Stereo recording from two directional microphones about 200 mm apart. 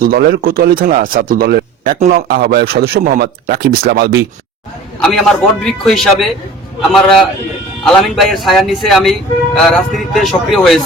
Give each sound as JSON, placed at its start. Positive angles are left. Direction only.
{"t": 0.0, "sound": "a man's voice", "side_deg": -50}
{"t": 4.9, "sound": "speech", "side_deg": 0}